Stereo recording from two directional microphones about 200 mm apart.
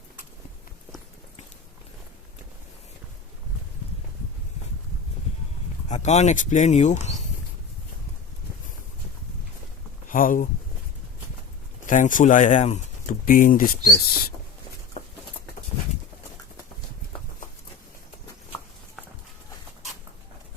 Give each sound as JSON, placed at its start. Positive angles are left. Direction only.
{"t": 5.9, "sound": "speech", "side_deg": 35}
{"t": 10.1, "sound": "speech", "side_deg": 45}
{"t": 11.9, "sound": "speech", "side_deg": 40}